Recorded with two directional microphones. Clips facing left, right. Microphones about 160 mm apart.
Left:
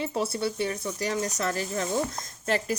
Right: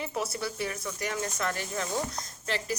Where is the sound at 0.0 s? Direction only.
30° left (ahead or behind).